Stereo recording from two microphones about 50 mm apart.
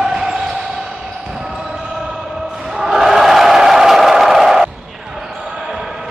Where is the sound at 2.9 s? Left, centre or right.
Centre.